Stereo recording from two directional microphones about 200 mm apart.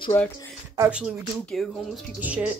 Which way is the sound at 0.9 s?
Centre (ahead or behind).